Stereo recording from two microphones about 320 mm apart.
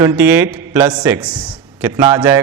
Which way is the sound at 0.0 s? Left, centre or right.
Centre.